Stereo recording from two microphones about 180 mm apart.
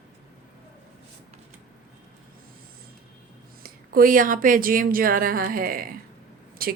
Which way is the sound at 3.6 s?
55° right (ahead or behind).